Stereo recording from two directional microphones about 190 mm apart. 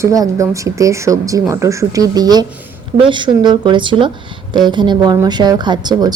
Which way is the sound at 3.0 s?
25° right (ahead or behind).